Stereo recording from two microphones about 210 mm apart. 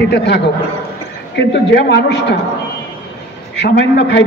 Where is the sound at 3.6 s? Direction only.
55° left (ahead or behind).